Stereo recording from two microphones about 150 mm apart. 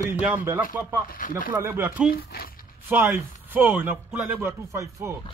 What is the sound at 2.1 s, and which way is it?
Speech, 90° left.